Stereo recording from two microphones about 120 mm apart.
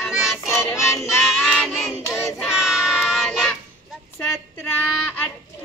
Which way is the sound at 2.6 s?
Centre (ahead or behind).